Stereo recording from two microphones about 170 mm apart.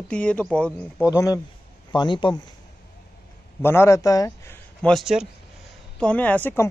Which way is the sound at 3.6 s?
15° left (ahead or behind).